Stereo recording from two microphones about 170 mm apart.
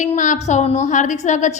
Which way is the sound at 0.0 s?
50° left (ahead or behind).